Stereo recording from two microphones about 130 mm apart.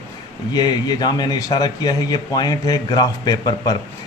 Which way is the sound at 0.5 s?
30° left (ahead or behind).